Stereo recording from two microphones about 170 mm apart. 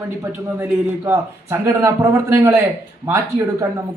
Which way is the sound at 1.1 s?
15° right (ahead or behind).